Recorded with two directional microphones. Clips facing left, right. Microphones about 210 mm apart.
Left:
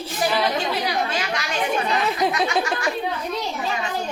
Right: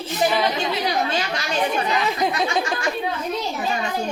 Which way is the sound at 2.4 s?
5° left (ahead or behind).